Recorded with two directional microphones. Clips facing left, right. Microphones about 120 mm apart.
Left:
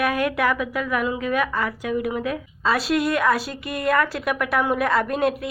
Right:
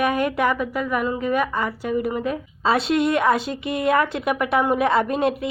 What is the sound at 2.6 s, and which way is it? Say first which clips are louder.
Speech: right 2 dB; 25° right (ahead or behind).